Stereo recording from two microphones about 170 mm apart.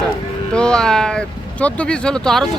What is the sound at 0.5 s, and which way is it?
Speech, 5° left (ahead or behind).